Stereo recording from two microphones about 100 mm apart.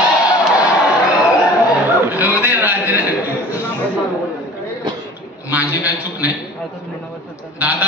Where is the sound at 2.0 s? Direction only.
20° right (ahead or behind).